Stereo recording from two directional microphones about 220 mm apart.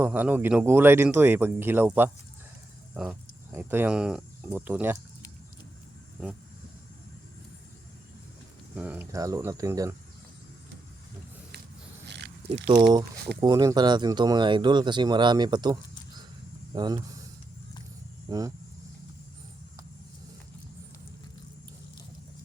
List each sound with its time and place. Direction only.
0.0 s speech: 10° right (ahead or behind)
8.7 s speech: 5° right (ahead or behind)
12.0 s wild animals: 50° right (ahead or behind)
12.6 s speech: 20° right (ahead or behind)
18.3 s speech: 15° right (ahead or behind)